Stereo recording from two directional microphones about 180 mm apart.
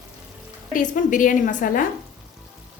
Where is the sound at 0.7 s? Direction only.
45° left (ahead or behind).